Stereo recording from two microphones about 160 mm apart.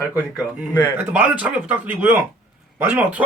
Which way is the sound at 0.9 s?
10° right (ahead or behind).